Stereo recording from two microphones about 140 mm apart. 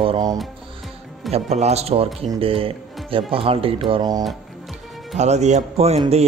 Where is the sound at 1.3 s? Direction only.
50° right (ahead or behind); by 4.2 s 30° right (ahead or behind).